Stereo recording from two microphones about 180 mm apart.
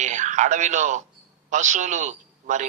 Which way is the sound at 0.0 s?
40° right (ahead or behind).